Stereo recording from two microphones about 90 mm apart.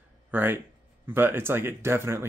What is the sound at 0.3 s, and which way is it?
Speech, 25° right (ahead or behind).